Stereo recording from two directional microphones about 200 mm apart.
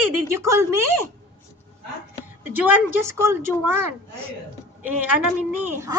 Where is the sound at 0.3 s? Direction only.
15° right (ahead or behind).